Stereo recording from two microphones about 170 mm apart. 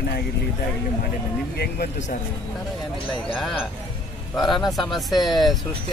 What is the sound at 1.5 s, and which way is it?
Speech, 65° left (ahead or behind).